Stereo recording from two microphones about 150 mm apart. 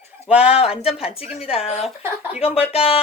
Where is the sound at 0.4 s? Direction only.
45° left (ahead or behind).